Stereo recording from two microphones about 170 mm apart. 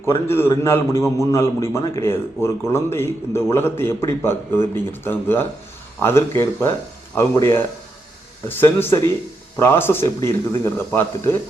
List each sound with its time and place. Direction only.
0.0 s a man's voice: 15° left (ahead or behind)